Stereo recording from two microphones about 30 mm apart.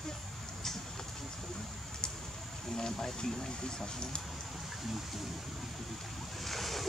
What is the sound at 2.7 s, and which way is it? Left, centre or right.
Speech, centre.